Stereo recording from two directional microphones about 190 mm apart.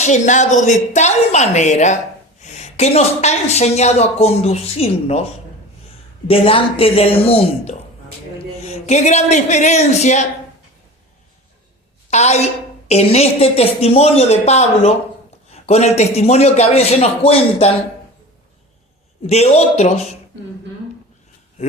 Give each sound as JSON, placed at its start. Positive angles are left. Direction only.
{"t": 0.0, "sound": "a woman's voice", "side_deg": 40}
{"t": 6.2, "sound": "a woman's voice", "side_deg": 30}
{"t": 12.1, "sound": "a woman's voice", "side_deg": 35}
{"t": 19.3, "sound": "a woman's voice", "side_deg": 35}